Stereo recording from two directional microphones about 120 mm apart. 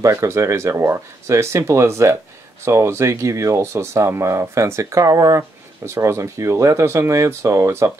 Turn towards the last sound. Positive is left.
turn(degrees=-20)  # may be behind; listen again after turning